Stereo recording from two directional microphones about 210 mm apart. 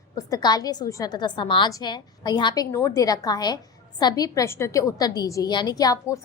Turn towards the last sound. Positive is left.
turn(degrees=15)  # may be behind; listen again after turning